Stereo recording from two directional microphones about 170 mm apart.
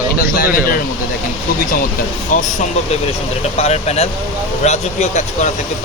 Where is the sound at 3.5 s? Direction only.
40° left (ahead or behind).